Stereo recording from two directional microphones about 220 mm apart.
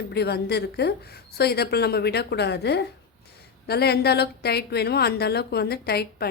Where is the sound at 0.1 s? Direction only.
50° left (ahead or behind).